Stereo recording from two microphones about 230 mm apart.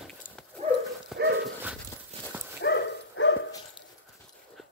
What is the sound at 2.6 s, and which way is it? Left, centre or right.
Dog, left.